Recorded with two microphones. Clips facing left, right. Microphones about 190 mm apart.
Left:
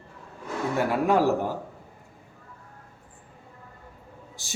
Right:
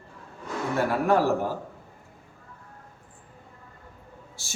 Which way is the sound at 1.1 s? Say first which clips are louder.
Even; 15° left (ahead or behind).